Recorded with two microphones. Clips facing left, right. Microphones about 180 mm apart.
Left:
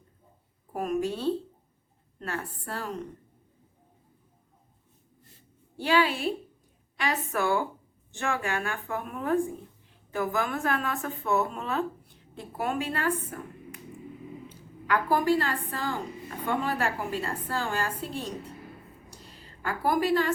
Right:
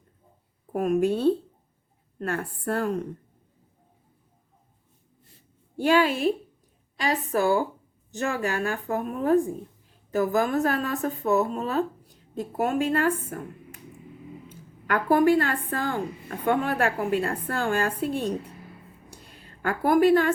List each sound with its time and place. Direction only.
0.7 s a woman's voice: 50° right (ahead or behind)
5.7 s a woman's voice: 45° right (ahead or behind)
6.9 s a woman's voice: 35° right (ahead or behind)
14.5 s a woman's voice: 55° right (ahead or behind)
19.6 s a woman's voice: 55° right (ahead or behind)